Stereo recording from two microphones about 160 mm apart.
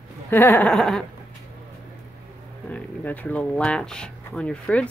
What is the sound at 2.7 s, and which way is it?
Speech, 10° left (ahead or behind).